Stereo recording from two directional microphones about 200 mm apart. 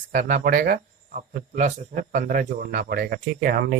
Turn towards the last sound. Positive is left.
turn(degrees=-50)  # may be behind; listen again after turning